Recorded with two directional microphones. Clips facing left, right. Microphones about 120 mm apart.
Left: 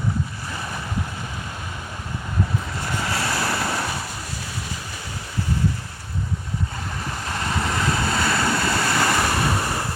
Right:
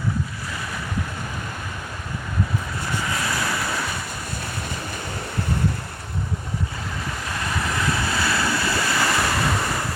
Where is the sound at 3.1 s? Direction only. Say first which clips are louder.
Left 3 dB; 35° left (ahead or behind).